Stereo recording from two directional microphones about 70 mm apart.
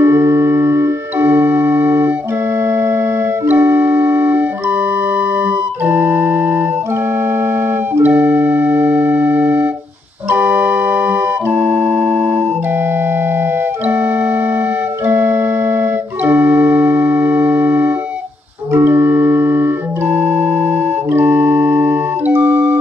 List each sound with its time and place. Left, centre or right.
0.0 s organ: right
2.7 s music: right
3.4 s music: right
5.9 s organ: right
8.0 s organ: right
13.8 s organ: right
18.7 s organ: right
22.3 s music: right